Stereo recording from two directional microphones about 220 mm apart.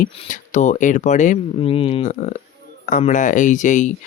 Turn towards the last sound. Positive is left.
turn(degrees=35)  # may be behind; listen again after turning